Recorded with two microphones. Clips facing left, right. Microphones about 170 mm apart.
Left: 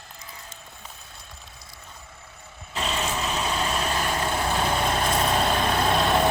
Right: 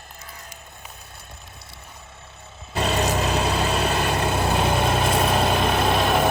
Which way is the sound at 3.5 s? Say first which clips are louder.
Right 4 dB; 65° right (ahead or behind).